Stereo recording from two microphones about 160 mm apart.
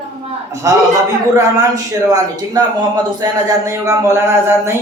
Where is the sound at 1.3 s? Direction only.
20° right (ahead or behind).